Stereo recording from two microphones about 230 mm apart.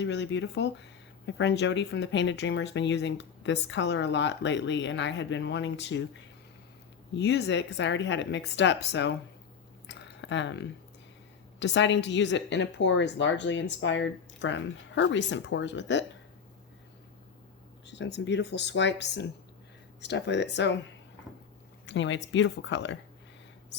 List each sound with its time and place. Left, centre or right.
0.0 s speech: left
7.1 s speech: left
9.8 s a sound: left
11.6 s speech: left
17.8 s speech: left
21.8 s speech: left